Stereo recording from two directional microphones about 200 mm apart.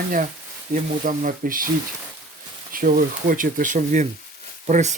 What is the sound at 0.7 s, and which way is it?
Speech, 45° right (ahead or behind).